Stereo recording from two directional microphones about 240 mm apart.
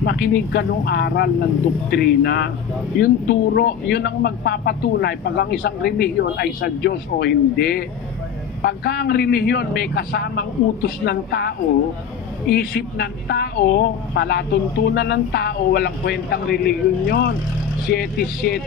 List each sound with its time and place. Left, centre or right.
0.0 s speech: left